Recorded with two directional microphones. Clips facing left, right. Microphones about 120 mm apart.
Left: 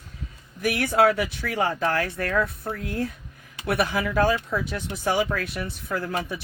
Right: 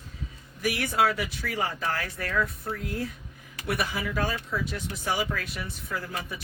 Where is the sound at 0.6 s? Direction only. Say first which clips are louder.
Left 5 dB; 55° left (ahead or behind).